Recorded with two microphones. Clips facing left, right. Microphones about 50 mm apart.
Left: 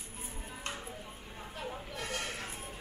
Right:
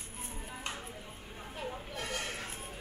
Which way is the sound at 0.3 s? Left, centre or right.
Centre.